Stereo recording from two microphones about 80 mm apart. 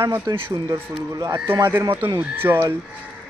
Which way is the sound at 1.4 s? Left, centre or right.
Right.